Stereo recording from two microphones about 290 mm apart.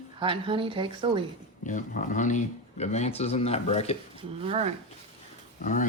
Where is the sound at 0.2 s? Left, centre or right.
Centre.